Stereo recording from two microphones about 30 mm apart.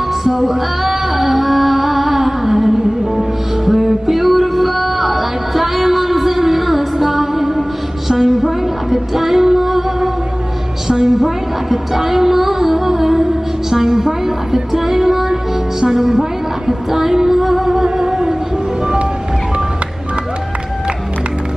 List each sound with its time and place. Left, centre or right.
0.2 s music: centre
8.3 s female singing: centre
10.9 s child singing: centre
16.0 s music: centre
18.0 s music: right